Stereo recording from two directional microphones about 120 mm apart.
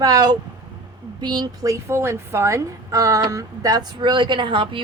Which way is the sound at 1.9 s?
20° right (ahead or behind).